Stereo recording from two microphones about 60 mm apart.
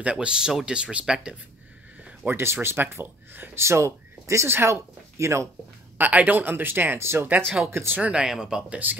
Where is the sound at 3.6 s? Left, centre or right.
Right.